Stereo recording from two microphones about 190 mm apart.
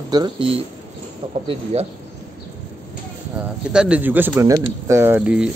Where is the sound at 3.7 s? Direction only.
5° right (ahead or behind).